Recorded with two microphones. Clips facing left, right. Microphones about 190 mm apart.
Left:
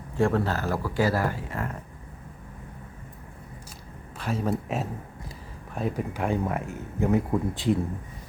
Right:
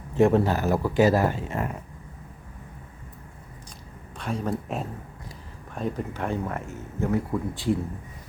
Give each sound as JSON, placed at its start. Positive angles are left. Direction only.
{"t": 0.2, "sound": "speech", "side_deg": -20}
{"t": 4.2, "sound": "speech", "side_deg": 5}